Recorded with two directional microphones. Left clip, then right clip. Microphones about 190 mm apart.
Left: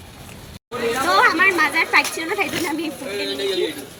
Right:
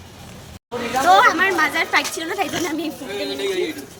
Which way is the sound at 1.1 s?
15° right (ahead or behind).